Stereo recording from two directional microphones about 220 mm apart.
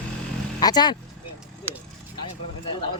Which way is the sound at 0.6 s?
20° left (ahead or behind).